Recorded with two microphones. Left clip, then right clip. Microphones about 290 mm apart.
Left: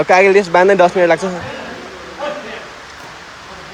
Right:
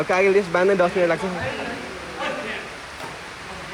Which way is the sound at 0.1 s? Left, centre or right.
Centre.